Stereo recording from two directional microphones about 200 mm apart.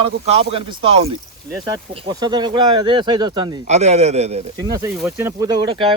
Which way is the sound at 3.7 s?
35° right (ahead or behind).